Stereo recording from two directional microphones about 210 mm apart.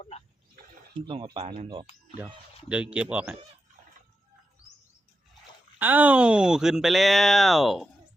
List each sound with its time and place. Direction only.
1.0 s speech: 25° right (ahead or behind)
2.6 s speech: 5° right (ahead or behind)
5.8 s speech: 10° right (ahead or behind)